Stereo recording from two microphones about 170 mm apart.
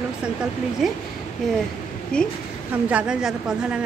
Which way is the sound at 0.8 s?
Centre (ahead or behind).